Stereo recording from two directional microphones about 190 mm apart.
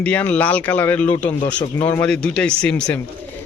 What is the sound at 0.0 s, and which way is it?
Speech, 10° left (ahead or behind).